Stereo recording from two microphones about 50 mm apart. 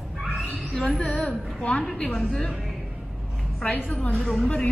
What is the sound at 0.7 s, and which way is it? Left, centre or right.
Speech, centre.